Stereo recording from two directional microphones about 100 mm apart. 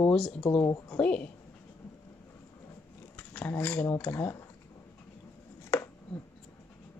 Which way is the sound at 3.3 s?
20° left (ahead or behind).